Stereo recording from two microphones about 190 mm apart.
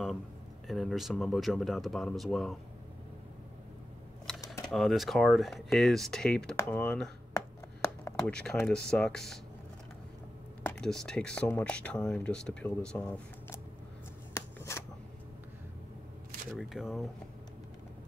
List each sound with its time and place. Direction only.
0.7 s speech: centre (ahead or behind)
4.5 s speech: centre (ahead or behind)
10.6 s speech: 5° left (ahead or behind)
14.3 s shuffling cards: 15° left (ahead or behind)
16.5 s speech: centre (ahead or behind)